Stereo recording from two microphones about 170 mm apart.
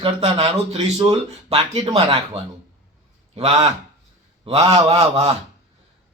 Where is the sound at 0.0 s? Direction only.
35° right (ahead or behind).